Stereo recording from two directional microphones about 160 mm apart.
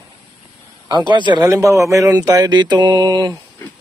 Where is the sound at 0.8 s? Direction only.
30° right (ahead or behind).